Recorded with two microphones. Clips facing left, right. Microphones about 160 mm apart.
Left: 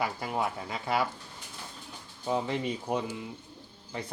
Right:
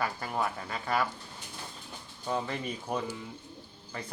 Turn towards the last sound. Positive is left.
turn(degrees=20)  # may be behind; listen again after turning